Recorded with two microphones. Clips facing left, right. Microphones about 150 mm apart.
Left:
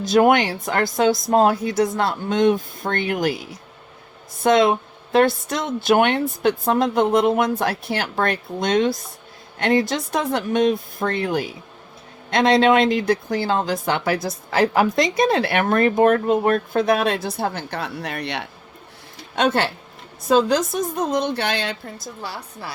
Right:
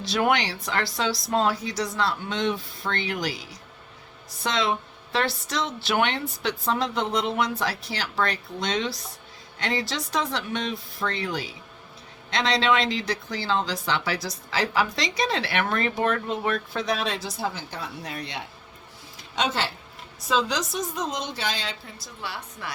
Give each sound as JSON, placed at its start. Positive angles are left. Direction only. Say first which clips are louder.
{"t": 0.0, "sound": "speech", "louder": "left 8 dB", "side_deg": 45}
{"t": 19.4, "sound": "speech", "louder": "left 7 dB", "side_deg": 55}